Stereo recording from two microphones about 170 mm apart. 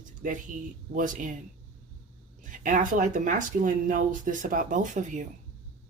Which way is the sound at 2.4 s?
50° right (ahead or behind).